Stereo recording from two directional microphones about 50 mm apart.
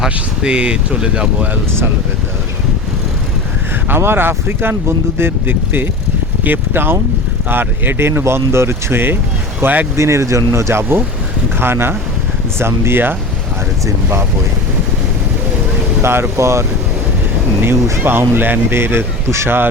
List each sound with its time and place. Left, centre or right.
0.0 s speech: centre
3.8 s speech: right
9.6 s speech: right
9.9 s speech: right
13.8 s speech: right
16.0 s speech: right
16.4 s speech: right
18.0 s speech: right